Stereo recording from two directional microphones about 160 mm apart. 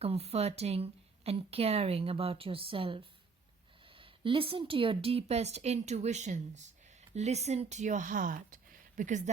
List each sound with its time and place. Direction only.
0.0 s a woman's voice: 40° right (ahead or behind)